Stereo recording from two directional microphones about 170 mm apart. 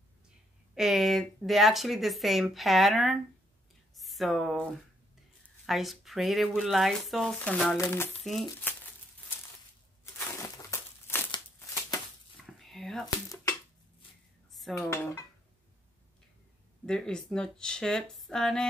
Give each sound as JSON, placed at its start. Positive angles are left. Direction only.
{"t": 0.7, "sound": "speech", "side_deg": 0}
{"t": 7.7, "sound": "speech", "side_deg": 15}
{"t": 8.2, "sound": "speech", "side_deg": 0}
{"t": 8.7, "sound": "crumpling", "side_deg": 10}
{"t": 10.7, "sound": "crumpling", "side_deg": 15}
{"t": 12.5, "sound": "whispering", "side_deg": 0}
{"t": 14.5, "sound": "dishes", "side_deg": 0}
{"t": 16.8, "sound": "speech", "side_deg": 5}